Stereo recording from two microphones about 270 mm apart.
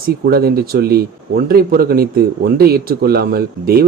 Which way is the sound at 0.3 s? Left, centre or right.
Right.